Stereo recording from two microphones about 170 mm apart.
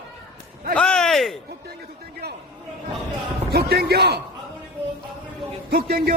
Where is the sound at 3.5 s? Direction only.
70° right (ahead or behind).